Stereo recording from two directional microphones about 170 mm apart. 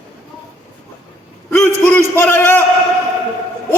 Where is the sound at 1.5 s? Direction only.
10° left (ahead or behind).